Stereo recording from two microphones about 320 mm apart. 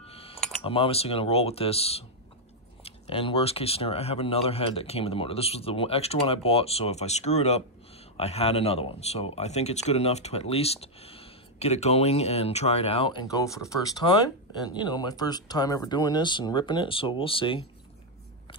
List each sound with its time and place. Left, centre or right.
0.0 s speech: centre